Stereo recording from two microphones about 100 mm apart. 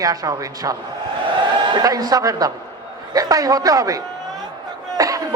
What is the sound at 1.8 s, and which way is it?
A man's voice, 35° right (ahead or behind).